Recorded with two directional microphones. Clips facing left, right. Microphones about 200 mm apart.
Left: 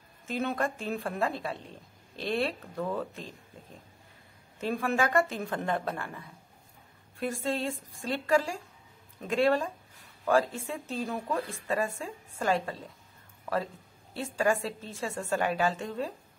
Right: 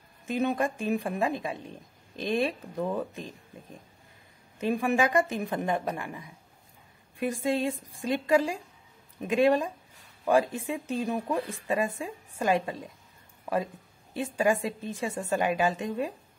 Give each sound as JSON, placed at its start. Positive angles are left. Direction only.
{"t": 0.3, "sound": "a woman's voice", "side_deg": -15}
{"t": 4.6, "sound": "a woman's voice", "side_deg": -15}
{"t": 14.1, "sound": "a woman's voice", "side_deg": -15}